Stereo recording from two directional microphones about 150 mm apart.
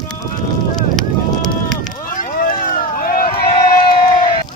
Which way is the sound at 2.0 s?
65° left (ahead or behind).